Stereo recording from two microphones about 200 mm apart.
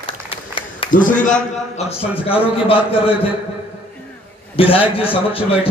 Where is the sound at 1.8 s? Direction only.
30° left (ahead or behind).